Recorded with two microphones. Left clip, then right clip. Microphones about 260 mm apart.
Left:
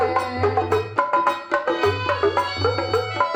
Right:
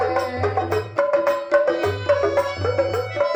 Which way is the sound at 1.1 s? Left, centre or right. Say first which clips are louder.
Right 1 dB; centre.